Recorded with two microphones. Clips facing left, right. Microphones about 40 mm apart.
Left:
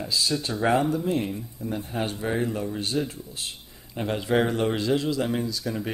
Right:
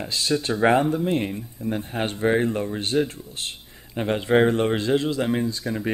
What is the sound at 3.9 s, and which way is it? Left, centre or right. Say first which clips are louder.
Speech: right 4 dB; right.